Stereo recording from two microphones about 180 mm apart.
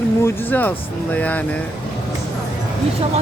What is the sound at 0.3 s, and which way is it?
Speech, 10° left (ahead or behind).